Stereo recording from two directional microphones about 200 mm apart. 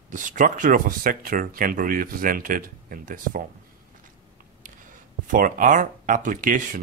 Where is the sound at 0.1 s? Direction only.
40° right (ahead or behind).